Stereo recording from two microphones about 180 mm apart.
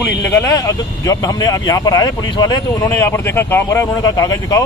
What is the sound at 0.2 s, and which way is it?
A man's voice, 15° left (ahead or behind).